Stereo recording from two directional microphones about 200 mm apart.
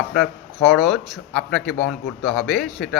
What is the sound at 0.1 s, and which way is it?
Speech, centre (ahead or behind).